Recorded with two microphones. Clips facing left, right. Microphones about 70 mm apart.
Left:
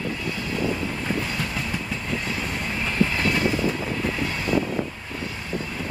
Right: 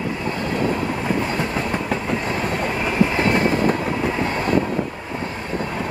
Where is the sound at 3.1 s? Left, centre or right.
Right.